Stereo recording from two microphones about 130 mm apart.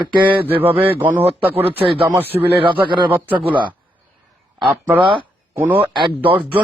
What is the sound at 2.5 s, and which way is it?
Speech, 40° right (ahead or behind).